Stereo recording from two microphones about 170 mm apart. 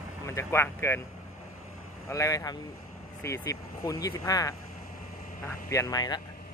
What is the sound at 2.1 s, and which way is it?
Speech, 20° left (ahead or behind).